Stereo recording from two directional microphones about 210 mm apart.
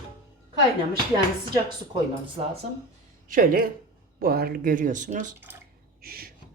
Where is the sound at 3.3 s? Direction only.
40° right (ahead or behind).